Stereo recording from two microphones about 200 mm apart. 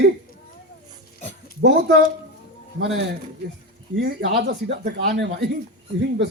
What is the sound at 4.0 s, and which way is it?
A man's voice, 55° right (ahead or behind).